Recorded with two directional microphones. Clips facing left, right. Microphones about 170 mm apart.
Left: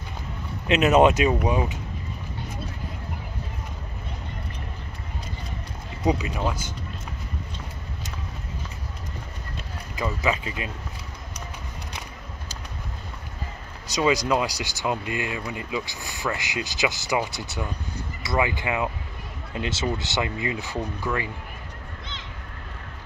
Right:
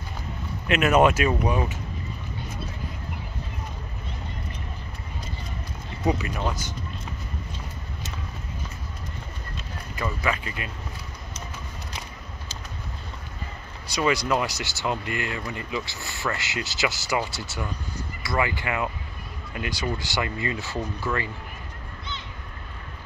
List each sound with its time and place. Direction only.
0.7 s speech: 20° left (ahead or behind)
6.0 s speech: 15° left (ahead or behind)
9.9 s speech: 15° left (ahead or behind)
13.9 s speech: 20° left (ahead or behind)